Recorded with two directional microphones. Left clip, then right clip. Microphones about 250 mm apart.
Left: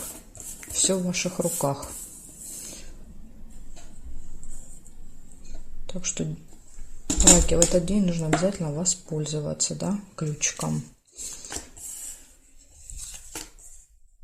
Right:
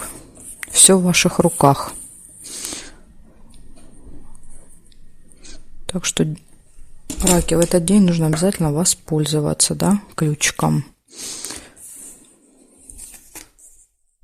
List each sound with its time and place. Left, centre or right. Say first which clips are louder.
0.6 s speech: right 11 dB; right
5.8 s speech: right 11 dB; right
7.4 s speech: right 5 dB; right